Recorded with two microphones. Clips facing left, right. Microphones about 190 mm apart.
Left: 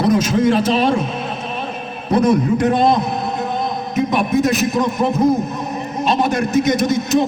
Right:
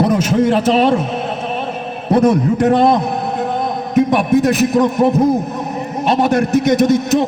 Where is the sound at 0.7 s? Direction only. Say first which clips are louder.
Right 3 dB; 65° right (ahead or behind).